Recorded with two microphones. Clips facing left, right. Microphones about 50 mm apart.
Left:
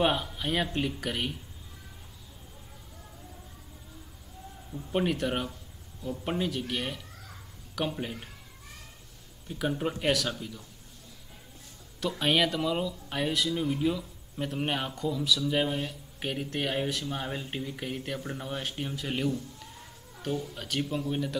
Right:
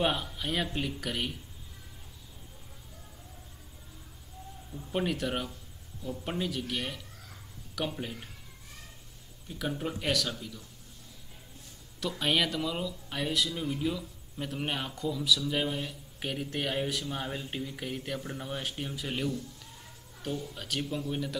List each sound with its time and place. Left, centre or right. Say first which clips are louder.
0.0 s speech: left 3 dB; centre
4.7 s speech: left 3 dB; centre
9.6 s speech: left 4 dB; centre
12.0 s speech: left 3 dB; centre
20.5 s speech: left 3 dB; centre